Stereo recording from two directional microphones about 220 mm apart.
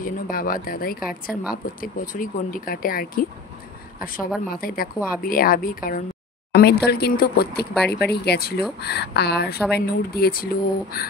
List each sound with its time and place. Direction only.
0.0 s speech: 40° left (ahead or behind)
7.7 s speech: 5° left (ahead or behind)
8.1 s speech: 45° left (ahead or behind)